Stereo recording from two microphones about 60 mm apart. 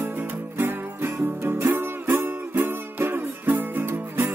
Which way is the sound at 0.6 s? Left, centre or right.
Right.